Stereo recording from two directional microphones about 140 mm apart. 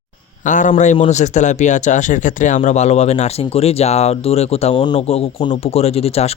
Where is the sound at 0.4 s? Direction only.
65° left (ahead or behind).